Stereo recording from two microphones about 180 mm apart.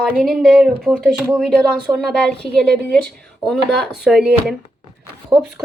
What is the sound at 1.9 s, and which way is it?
Speech, 15° right (ahead or behind).